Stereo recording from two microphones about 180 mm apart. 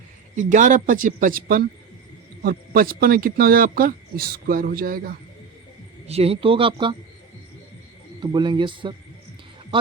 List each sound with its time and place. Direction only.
0.3 s speech: 45° right (ahead or behind)
6.1 s speech: 35° right (ahead or behind)
8.2 s speech: 25° right (ahead or behind)